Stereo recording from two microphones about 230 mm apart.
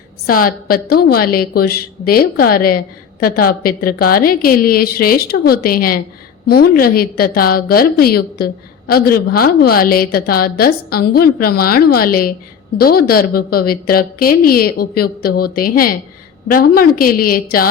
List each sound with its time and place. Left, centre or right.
0.3 s a woman's voice: left